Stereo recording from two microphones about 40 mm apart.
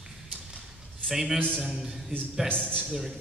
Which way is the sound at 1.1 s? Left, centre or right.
Centre.